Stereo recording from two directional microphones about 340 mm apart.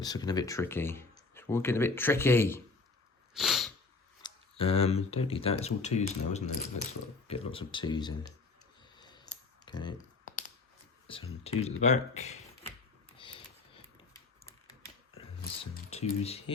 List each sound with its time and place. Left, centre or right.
0.0 s speech: centre
3.3 s sneeze: centre
4.2 s speech: centre
9.0 s clicking: centre
11.0 s speech: centre
13.1 s typing: centre
15.9 s speech: centre